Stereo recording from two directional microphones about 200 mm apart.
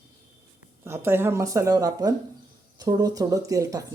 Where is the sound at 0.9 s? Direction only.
10° right (ahead or behind).